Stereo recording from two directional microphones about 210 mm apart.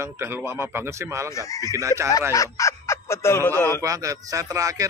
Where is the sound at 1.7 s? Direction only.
15° right (ahead or behind).